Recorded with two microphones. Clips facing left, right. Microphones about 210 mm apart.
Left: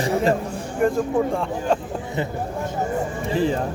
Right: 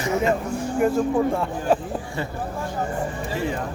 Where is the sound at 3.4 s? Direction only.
30° left (ahead or behind).